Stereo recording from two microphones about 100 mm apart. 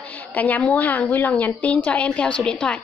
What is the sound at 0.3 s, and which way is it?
A woman's voice, 15° left (ahead or behind).